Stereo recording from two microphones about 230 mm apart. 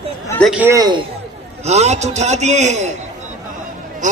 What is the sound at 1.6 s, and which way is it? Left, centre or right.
A man's voice, right.